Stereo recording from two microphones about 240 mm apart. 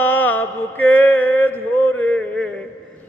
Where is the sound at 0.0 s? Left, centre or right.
Centre.